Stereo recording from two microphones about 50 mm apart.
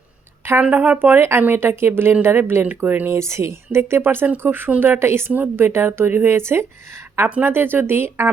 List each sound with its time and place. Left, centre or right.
0.6 s speech: right
0.9 s a woman's voice: right
2.8 s a woman's voice: right
3.1 s speech: right
5.3 s a woman's voice: right
5.6 s speech: right
7.4 s speech: right